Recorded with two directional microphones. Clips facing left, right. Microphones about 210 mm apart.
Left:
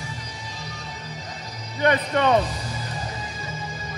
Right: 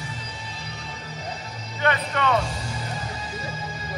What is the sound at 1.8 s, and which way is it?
Music, 20° left (ahead or behind).